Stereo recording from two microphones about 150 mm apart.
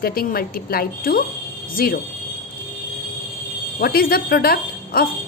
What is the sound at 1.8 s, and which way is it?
Speech, 90° left.